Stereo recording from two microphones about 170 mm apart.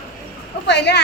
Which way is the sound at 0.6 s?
85° left.